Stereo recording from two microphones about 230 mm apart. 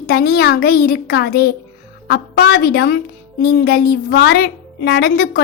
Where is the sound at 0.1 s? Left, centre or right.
Left.